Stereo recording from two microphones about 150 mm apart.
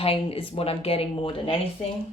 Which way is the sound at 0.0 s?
40° left (ahead or behind).